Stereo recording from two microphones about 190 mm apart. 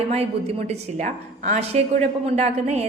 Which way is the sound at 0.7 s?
40° right (ahead or behind).